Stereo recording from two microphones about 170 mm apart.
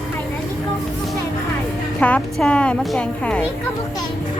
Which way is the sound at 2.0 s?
10° left (ahead or behind).